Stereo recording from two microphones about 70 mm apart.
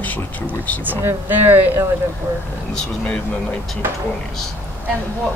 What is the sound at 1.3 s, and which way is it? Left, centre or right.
Speech, right.